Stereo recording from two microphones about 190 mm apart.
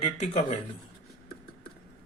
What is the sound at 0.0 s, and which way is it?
Speech, 35° left (ahead or behind).